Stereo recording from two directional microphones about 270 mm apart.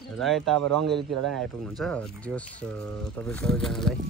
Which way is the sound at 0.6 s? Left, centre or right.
Right.